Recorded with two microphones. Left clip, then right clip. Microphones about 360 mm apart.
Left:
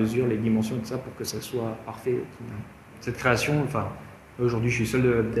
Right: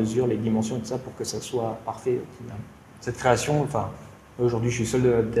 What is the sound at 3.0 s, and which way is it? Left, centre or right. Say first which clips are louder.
A man's voice: right 2 dB; right.